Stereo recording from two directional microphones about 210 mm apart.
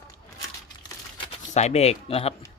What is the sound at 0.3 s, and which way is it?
Crumpling, 20° left (ahead or behind).